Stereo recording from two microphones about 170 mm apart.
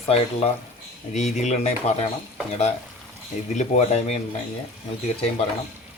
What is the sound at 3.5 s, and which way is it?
Speech, 45° left (ahead or behind).